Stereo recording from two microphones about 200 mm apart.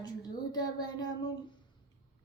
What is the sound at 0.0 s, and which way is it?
Speech, 20° left (ahead or behind).